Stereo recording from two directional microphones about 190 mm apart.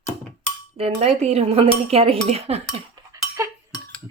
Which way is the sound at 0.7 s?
30° right (ahead or behind).